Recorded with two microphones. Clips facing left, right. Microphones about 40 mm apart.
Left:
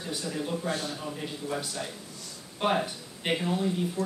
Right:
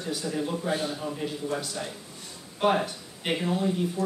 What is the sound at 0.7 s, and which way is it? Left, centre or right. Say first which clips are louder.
Speech: right 3 dB; centre.